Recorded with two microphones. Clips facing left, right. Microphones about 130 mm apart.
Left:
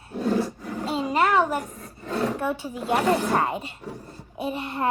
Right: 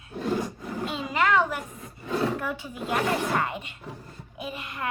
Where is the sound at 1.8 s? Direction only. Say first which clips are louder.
Even; 10° right (ahead or behind).